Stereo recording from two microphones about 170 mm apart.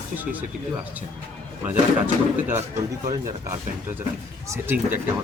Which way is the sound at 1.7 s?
10° right (ahead or behind).